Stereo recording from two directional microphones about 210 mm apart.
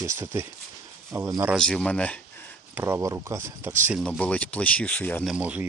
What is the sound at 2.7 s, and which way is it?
Speech, 15° right (ahead or behind).